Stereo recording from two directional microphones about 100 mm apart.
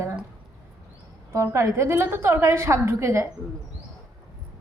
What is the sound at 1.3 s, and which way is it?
A woman's voice, 30° right (ahead or behind).